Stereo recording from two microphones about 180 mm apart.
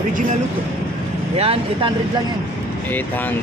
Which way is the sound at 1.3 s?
35° right (ahead or behind).